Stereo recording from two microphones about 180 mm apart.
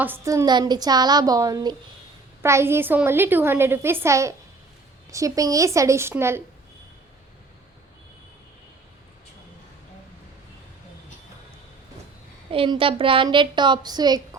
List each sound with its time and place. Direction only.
0.0 s a woman's voice: 15° right (ahead or behind)
12.5 s speech: 30° right (ahead or behind)